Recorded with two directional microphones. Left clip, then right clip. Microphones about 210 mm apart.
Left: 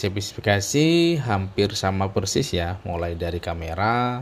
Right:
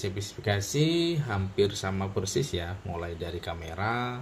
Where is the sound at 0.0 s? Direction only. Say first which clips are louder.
Left 8 dB; 40° left (ahead or behind).